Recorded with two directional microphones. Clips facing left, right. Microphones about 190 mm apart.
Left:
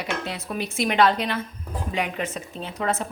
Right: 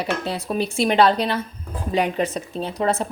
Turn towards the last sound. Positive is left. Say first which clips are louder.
# right 5 dB
turn(degrees=-35)  # may be behind; listen again after turning